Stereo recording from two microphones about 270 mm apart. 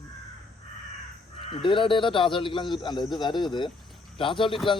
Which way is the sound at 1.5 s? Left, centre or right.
Centre.